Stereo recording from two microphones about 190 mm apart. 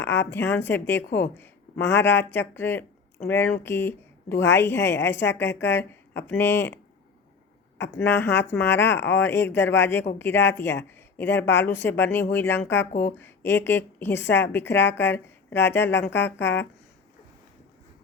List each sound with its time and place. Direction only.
0.2 s a woman's voice: 15° left (ahead or behind)
1.9 s speech: 65° left (ahead or behind)
2.3 s a woman's voice: 10° left (ahead or behind)
7.9 s a woman's voice: 10° left (ahead or behind)
12.9 s speech: 45° left (ahead or behind)
13.1 s a woman's voice: 10° left (ahead or behind)
16.1 s speech: 65° left (ahead or behind)